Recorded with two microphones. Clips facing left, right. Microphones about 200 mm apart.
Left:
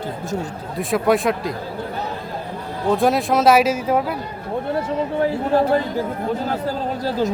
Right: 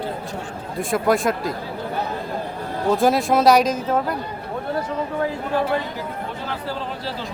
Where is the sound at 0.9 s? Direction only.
Centre (ahead or behind).